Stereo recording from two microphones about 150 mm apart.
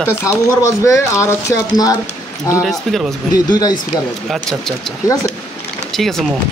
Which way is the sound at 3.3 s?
25° left (ahead or behind).